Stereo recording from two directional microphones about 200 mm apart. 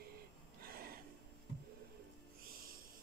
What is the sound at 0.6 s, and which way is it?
Gasp, 50° right (ahead or behind).